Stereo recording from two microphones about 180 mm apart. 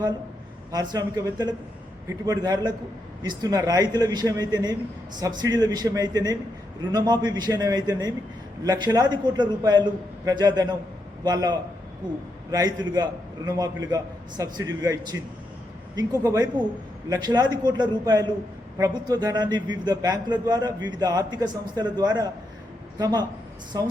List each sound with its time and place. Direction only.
0.7 s a man's voice: 20° right (ahead or behind)